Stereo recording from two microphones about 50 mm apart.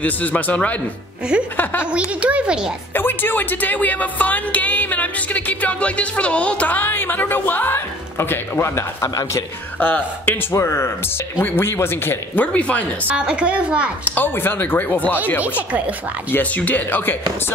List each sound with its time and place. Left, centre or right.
0.0 s speech: left
1.6 s speech: left
1.9 s speech: right
2.9 s speech: left
6.8 s speech: left
9.8 s speech: left
10.5 s speech: left
11.3 s speech: left
12.4 s speech: left
13.1 s speech: centre
14.0 s speech: left
16.3 s speech: left